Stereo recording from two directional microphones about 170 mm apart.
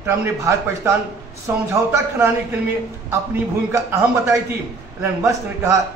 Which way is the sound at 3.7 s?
15° right (ahead or behind).